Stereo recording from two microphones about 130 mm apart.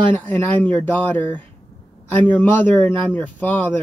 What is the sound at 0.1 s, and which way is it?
A man's voice, 15° left (ahead or behind).